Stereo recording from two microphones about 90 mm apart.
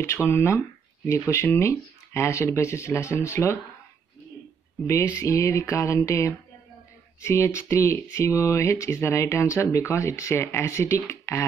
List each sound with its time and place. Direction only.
0.3 s speech: 30° left (ahead or behind)
4.8 s speech: 35° left (ahead or behind)